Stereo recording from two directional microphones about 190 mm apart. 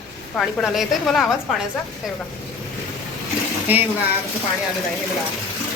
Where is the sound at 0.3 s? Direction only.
Centre (ahead or behind).